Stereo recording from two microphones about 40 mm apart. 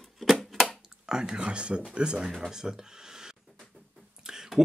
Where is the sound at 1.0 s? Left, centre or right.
Centre.